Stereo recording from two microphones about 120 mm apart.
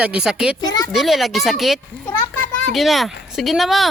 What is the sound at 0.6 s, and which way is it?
Speech, 30° left (ahead or behind).